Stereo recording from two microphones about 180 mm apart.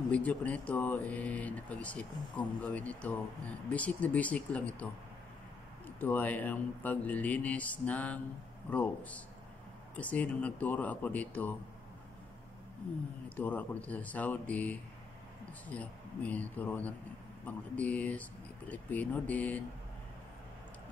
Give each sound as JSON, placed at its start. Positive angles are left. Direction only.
{"t": 0.1, "sound": "speech", "side_deg": 10}
{"t": 5.9, "sound": "speech", "side_deg": 10}
{"t": 13.4, "sound": "speech", "side_deg": 10}